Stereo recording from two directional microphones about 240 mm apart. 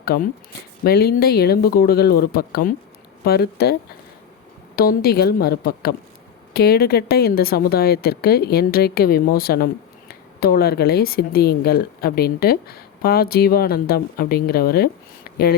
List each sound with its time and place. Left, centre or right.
0.0 s speech: left
4.8 s speech: left